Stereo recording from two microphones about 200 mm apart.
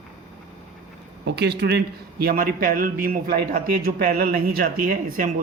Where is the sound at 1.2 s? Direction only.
55° right (ahead or behind).